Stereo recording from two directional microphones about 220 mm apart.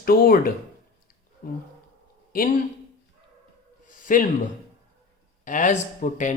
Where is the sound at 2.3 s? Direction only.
40° left (ahead or behind).